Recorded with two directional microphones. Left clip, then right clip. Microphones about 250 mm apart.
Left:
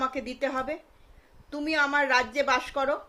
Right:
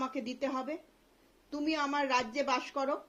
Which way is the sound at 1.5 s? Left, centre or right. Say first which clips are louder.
Left 7 dB; centre.